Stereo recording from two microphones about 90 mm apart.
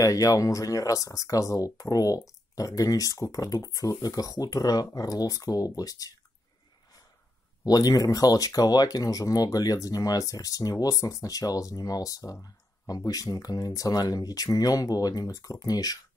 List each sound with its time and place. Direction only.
0.0 s speech: 40° left (ahead or behind)
7.6 s speech: 45° left (ahead or behind)